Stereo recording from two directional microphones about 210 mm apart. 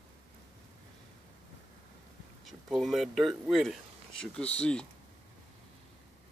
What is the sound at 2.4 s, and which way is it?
Speech, centre (ahead or behind).